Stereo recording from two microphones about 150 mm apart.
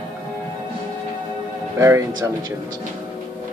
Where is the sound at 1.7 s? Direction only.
20° right (ahead or behind).